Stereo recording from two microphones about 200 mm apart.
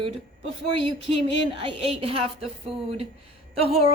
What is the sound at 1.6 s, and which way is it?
Speech, 30° right (ahead or behind).